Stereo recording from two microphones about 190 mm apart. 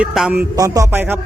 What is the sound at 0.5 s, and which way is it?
Music, 20° right (ahead or behind).